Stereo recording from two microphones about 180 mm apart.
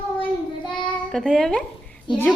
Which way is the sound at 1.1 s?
5° left (ahead or behind).